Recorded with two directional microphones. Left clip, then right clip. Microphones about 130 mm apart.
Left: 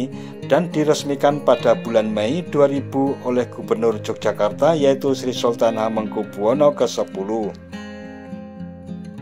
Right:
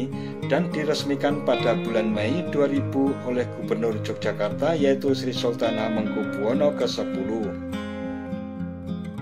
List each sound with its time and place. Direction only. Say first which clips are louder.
0.0 s speech: left 2 dB; 50° left (ahead or behind)